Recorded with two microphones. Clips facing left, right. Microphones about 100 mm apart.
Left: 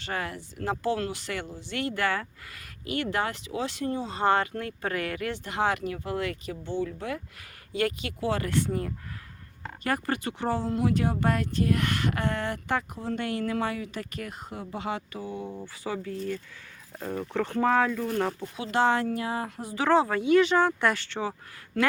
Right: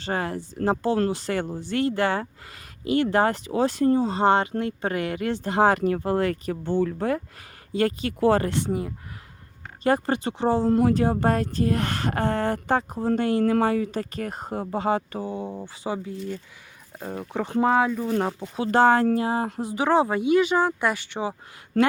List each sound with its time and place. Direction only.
0.0 s speech: 30° right (ahead or behind)
7.7 s speech: 35° right (ahead or behind)
9.8 s speech: 25° right (ahead or behind)
10.7 s speech: 40° right (ahead or behind); by 18.4 s 20° right (ahead or behind)
18.5 s speech: 40° right (ahead or behind); by 21.3 s 15° right (ahead or behind)
21.7 s speech: 35° right (ahead or behind)